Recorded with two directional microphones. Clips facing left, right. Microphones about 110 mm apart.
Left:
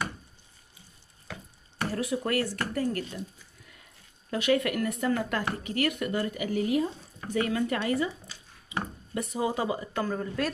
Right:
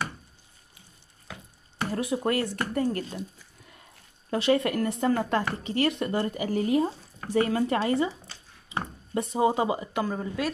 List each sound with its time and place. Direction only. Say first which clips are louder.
1.8 s speech: right 1 dB; 20° right (ahead or behind)
4.3 s speech: right 2 dB; 30° right (ahead or behind); by 10.5 s 10° right (ahead or behind)